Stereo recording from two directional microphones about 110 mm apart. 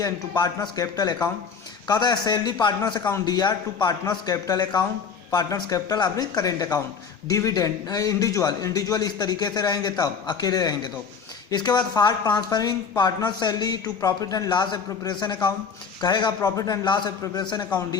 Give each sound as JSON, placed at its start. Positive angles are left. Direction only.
{"t": 0.0, "sound": "a man's voice", "side_deg": 40}